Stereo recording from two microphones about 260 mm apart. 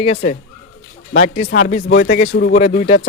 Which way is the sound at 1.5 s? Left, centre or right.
Left.